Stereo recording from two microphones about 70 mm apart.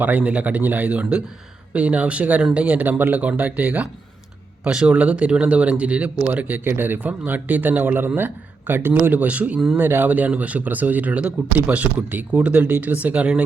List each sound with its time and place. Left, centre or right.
0.0 s speech: centre
9.0 s speech: centre
9.7 s speech: right